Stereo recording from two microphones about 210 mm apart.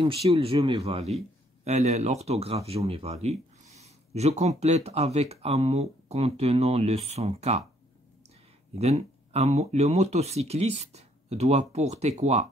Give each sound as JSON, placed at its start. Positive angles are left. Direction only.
{"t": 0.0, "sound": "speech", "side_deg": -25}
{"t": 8.7, "sound": "speech", "side_deg": -30}